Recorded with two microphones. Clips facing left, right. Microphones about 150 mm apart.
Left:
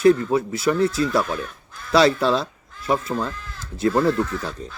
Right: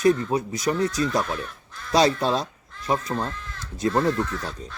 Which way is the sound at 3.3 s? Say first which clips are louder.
Left 1 dB; 5° left (ahead or behind).